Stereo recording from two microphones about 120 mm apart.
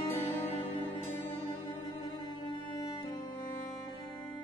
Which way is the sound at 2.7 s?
40° left (ahead or behind).